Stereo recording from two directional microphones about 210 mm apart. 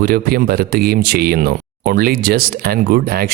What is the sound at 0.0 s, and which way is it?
Speech, 45° right (ahead or behind).